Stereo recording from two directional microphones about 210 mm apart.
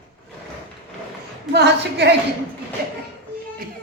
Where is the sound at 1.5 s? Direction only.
55° right (ahead or behind).